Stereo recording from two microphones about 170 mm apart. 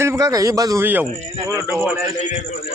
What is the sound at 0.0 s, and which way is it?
A man's voice, 20° right (ahead or behind).